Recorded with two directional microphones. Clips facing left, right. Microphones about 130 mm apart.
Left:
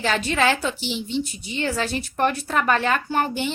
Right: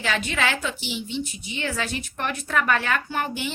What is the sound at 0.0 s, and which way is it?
A woman's voice, 35° left (ahead or behind).